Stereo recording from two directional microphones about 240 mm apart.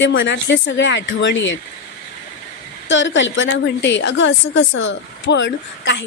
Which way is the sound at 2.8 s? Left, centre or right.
Left.